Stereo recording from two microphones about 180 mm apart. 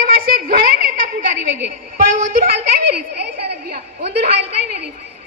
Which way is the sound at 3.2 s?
65° right (ahead or behind).